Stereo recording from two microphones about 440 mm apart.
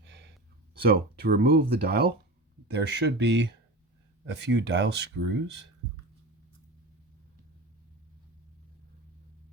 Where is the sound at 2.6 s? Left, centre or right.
Right.